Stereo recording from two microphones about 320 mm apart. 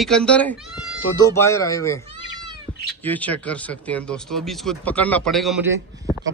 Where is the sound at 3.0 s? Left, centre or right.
Centre.